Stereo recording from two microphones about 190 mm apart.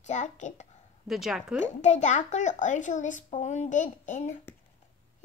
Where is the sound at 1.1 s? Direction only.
Centre (ahead or behind).